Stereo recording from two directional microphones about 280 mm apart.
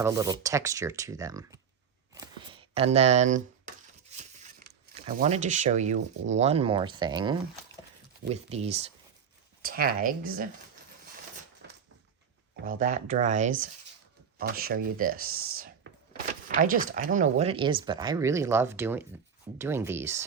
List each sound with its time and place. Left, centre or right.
0.0 s speech: centre
2.1 s a sound: centre
4.9 s speech: right
12.6 s speech: right
15.2 s speech: right
15.5 s a sound: right
16.6 s speech: right; by 20.2 s centre